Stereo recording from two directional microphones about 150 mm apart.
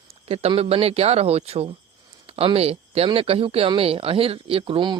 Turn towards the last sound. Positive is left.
turn(degrees=-35)  # may be behind; listen again after turning